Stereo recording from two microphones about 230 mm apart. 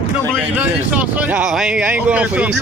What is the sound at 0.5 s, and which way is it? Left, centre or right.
Speech, centre.